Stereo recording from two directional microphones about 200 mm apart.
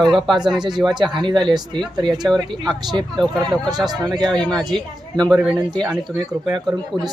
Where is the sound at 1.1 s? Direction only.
25° right (ahead or behind).